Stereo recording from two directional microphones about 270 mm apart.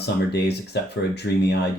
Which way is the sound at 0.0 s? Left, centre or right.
Left.